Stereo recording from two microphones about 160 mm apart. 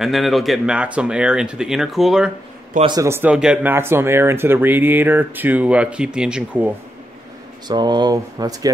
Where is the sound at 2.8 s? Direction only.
20° right (ahead or behind).